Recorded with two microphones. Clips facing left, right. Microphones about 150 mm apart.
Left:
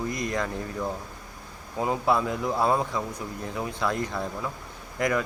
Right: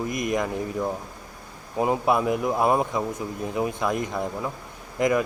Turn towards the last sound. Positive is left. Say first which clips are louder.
# right 4 dB
turn(degrees=-20)  # may be behind; listen again after turning